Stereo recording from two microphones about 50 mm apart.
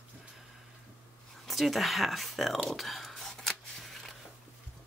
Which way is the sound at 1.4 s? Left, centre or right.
Centre.